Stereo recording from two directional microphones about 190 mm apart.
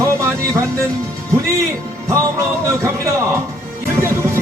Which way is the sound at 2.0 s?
15° right (ahead or behind).